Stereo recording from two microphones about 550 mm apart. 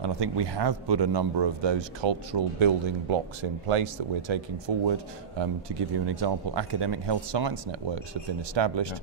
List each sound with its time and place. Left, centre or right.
0.0 s speech: right